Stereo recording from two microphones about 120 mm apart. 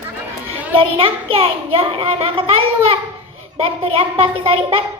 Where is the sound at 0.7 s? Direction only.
55° right (ahead or behind).